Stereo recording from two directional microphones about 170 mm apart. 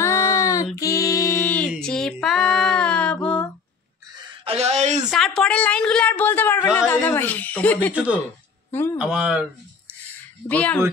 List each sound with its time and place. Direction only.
0.0 s child singing: 20° left (ahead or behind)
0.7 s female singing: 20° left (ahead or behind)
4.2 s a sound: 35° right (ahead or behind)
5.1 s a woman's voice: centre (ahead or behind)
7.9 s speech: 5° right (ahead or behind)
10.5 s a woman's voice: 10° left (ahead or behind)